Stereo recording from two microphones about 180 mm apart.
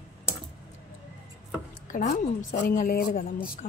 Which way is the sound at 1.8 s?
45° left (ahead or behind).